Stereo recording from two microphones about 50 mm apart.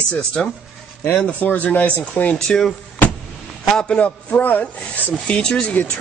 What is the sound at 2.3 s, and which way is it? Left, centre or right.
Speech, centre.